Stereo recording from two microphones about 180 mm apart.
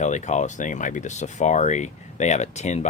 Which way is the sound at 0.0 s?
40° left (ahead or behind).